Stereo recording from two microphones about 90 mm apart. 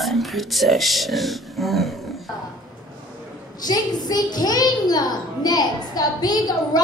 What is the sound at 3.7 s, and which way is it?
A child's voice, 45° left (ahead or behind).